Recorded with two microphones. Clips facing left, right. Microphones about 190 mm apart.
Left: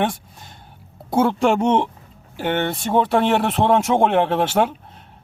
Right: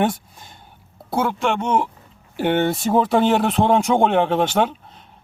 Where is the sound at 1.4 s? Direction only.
40° left (ahead or behind).